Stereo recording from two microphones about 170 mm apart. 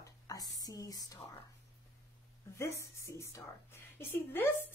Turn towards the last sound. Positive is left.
turn(degrees=10)  # may be behind; listen again after turning